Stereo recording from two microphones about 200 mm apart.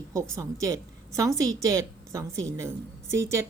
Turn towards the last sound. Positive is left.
turn(degrees=-15)  # may be behind; listen again after turning